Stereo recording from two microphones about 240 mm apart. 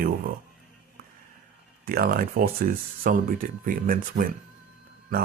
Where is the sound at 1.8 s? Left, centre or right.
Right.